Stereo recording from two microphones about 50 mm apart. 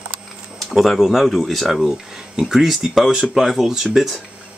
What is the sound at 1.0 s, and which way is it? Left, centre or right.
Speech, centre.